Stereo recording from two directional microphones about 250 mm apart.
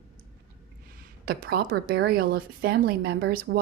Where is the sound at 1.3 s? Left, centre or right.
Right.